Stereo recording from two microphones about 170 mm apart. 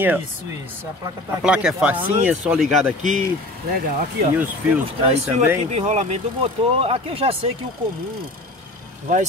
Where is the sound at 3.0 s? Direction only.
45° right (ahead or behind).